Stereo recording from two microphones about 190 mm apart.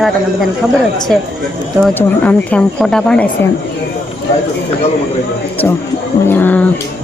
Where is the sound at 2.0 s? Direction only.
10° left (ahead or behind).